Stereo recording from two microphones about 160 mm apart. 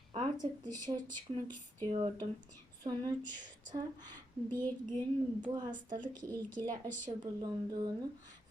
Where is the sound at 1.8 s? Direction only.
35° right (ahead or behind).